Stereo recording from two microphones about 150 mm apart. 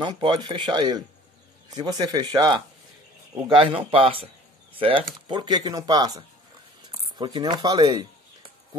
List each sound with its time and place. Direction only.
0.0 s speech: 30° right (ahead or behind)